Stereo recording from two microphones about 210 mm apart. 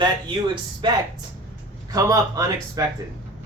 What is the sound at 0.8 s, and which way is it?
A man's voice, 20° right (ahead or behind).